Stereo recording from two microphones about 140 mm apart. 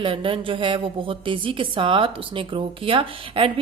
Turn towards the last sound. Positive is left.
turn(degrees=-40)  # may be behind; listen again after turning